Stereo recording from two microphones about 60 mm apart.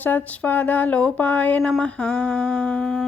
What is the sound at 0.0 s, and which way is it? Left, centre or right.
Speech, left.